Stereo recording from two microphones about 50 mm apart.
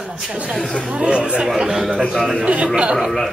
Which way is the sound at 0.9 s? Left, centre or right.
Right.